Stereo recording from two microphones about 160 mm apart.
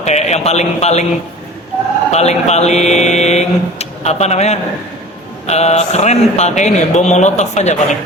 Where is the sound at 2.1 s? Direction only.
45° left (ahead or behind).